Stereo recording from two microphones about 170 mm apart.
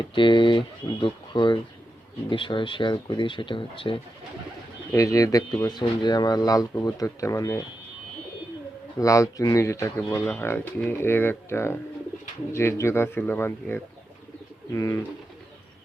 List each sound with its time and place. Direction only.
0.0 s speech: 30° left (ahead or behind)
4.9 s speech: 20° left (ahead or behind)
9.0 s speech: 20° left (ahead or behind)